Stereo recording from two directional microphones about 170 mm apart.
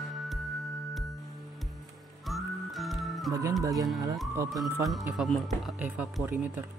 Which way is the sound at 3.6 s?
20° right (ahead or behind).